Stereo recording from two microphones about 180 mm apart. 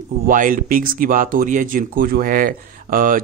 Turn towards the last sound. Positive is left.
turn(degrees=-50)  # may be behind; listen again after turning